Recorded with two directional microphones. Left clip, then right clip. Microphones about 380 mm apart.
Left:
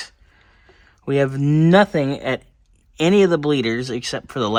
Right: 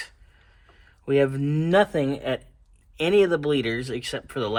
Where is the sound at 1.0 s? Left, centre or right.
Left.